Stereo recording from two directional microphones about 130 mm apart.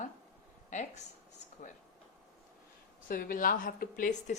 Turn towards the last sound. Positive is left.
turn(degrees=90)